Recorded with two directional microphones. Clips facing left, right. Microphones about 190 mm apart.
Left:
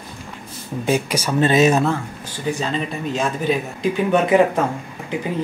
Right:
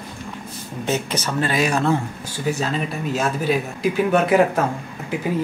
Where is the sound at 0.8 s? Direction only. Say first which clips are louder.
Left 3 dB; 10° left (ahead or behind).